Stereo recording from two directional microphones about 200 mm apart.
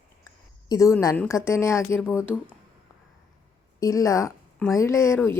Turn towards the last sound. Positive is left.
turn(degrees=15)  # may be behind; listen again after turning